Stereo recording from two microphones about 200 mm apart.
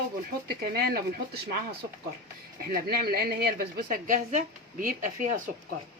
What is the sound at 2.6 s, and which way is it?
Speech, 50° right (ahead or behind).